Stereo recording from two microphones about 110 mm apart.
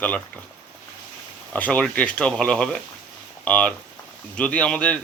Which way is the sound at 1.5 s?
10° left (ahead or behind).